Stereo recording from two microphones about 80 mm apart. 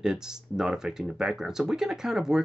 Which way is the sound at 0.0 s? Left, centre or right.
Centre.